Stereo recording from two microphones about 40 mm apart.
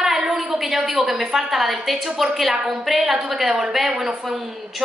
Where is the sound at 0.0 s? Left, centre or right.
Centre.